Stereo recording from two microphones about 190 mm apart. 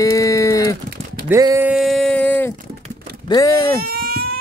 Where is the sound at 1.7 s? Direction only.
Centre (ahead or behind).